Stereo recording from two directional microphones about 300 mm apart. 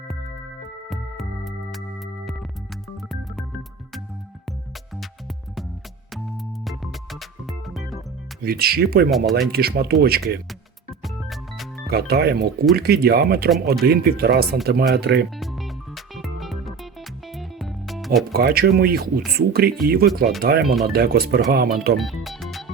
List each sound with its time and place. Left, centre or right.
0.9 s music: centre
6.1 s music: centre
8.4 s speech: right
9.0 s speech: centre
9.5 s speech: right
11.0 s music: centre
11.9 s speech: right
15.4 s music: centre
18.3 s speech: right
21.9 s music: centre